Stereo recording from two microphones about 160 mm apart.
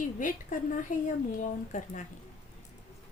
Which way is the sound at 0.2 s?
55° left (ahead or behind).